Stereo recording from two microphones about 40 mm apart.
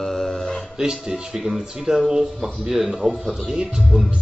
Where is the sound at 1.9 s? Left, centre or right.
Right.